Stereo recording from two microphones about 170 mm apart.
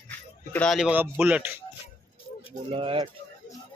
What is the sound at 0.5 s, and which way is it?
Speech, 5° left (ahead or behind).